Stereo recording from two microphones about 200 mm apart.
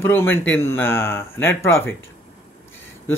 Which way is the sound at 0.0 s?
10° left (ahead or behind).